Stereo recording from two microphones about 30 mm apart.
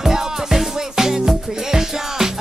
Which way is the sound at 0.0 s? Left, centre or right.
Centre.